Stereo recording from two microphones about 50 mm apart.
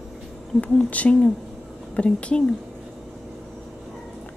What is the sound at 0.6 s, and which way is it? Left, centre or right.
A woman's voice, left.